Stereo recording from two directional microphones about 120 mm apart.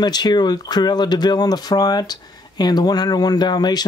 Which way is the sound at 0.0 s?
35° left (ahead or behind).